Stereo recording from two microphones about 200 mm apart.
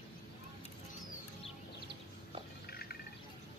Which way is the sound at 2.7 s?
50° left (ahead or behind).